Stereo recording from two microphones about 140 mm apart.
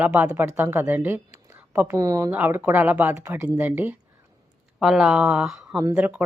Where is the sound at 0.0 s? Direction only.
10° right (ahead or behind).